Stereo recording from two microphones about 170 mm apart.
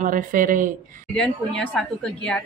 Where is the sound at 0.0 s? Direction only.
50° right (ahead or behind).